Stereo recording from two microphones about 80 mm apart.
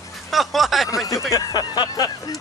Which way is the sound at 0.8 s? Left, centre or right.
Left.